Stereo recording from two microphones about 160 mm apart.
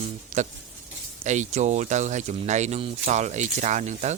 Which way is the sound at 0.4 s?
45° right (ahead or behind).